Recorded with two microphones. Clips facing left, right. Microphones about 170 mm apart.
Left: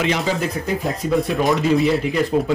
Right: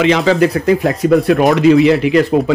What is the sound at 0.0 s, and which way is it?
Speech, 90° right.